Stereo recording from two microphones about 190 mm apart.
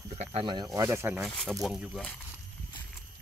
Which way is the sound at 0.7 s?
15° right (ahead or behind).